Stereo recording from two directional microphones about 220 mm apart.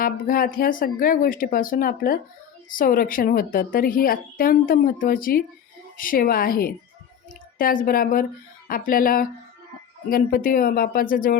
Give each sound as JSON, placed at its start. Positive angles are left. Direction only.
{"t": 0.0, "sound": "a woman's voice", "side_deg": 40}